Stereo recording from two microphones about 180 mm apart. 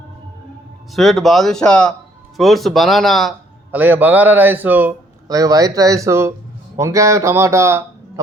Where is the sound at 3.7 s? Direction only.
10° right (ahead or behind).